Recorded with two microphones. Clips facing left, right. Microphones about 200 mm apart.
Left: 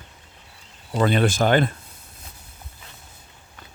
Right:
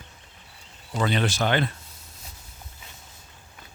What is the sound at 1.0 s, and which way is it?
Speech, 50° left (ahead or behind).